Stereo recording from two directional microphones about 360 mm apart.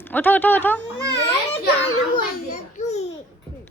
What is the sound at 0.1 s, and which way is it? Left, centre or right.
Speech, centre.